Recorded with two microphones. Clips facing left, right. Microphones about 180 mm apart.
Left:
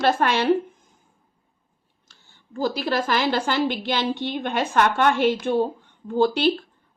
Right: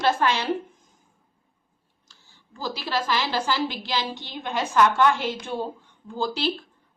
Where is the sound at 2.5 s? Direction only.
55° left (ahead or behind).